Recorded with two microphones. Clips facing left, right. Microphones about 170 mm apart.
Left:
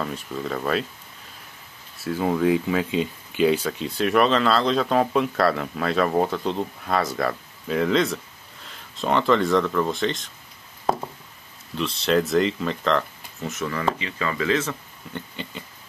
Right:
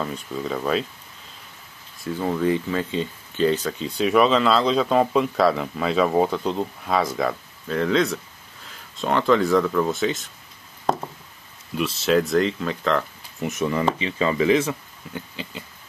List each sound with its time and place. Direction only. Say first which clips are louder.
0.0 s speech: right 1 dB; centre (ahead or behind)
2.0 s speech: left 1 dB; 10° left (ahead or behind)
10.9 s a sound: even; centre (ahead or behind)
11.7 s speech: right 1 dB; 5° right (ahead or behind)
13.4 s speech: right 5 dB; 20° right (ahead or behind)